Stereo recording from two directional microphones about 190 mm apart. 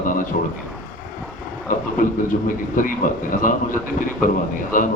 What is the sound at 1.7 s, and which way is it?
A man's voice, 45° left (ahead or behind).